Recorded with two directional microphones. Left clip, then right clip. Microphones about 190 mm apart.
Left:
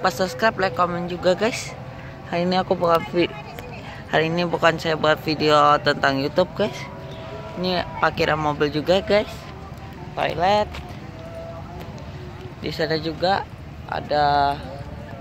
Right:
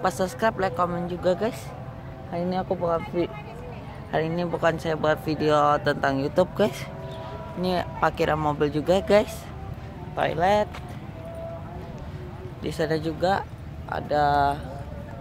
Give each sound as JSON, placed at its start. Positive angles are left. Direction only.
{"t": 0.0, "sound": "speech", "side_deg": 0}
{"t": 9.0, "sound": "speech", "side_deg": -20}
{"t": 12.6, "sound": "speech", "side_deg": -10}